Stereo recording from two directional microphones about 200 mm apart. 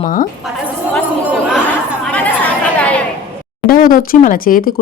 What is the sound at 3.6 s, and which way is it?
Speech, 45° left (ahead or behind).